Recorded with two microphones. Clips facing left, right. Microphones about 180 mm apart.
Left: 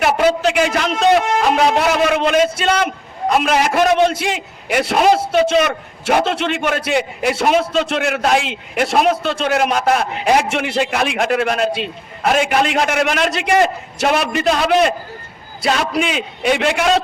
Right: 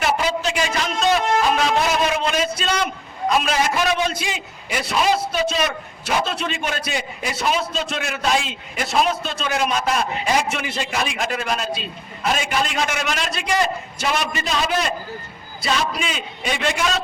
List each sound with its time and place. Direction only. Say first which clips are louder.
0.0 s a man's voice: left 7 dB; 60° left (ahead or behind)